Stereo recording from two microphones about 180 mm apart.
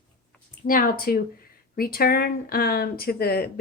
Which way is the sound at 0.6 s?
50° left (ahead or behind).